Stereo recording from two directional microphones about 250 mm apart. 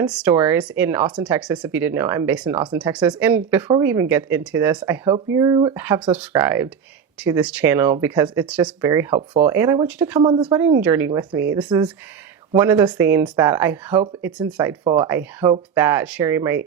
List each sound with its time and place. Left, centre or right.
0.0 s speech: centre
5.8 s speech: centre
10.2 s speech: centre